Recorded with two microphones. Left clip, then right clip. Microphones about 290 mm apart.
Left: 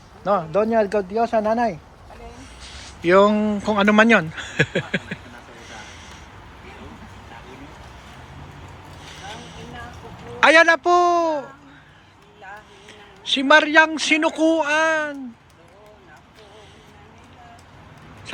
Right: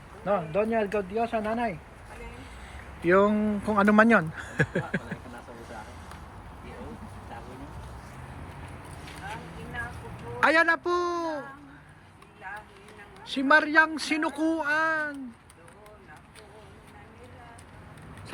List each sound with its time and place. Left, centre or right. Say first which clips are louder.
0.3 s speech: left 7 dB; centre
3.0 s speech: left 7 dB; centre
10.4 s speech: left 9 dB; centre
13.3 s speech: left 7 dB; centre